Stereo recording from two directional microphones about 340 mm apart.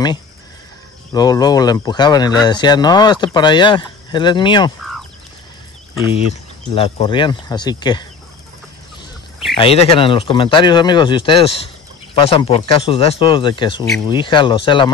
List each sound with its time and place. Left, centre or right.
1.1 s speech: centre
6.0 s speech: centre
9.6 s speech: centre